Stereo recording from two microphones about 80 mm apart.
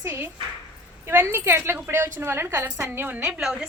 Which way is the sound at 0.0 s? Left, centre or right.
Right.